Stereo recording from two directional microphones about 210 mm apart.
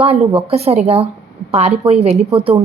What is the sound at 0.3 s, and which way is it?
A woman's voice, 25° right (ahead or behind).